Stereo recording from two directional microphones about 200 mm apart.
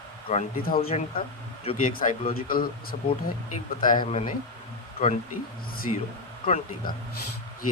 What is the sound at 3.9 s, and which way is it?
Speech, 30° left (ahead or behind).